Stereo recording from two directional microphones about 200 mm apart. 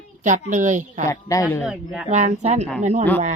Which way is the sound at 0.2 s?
40° right (ahead or behind).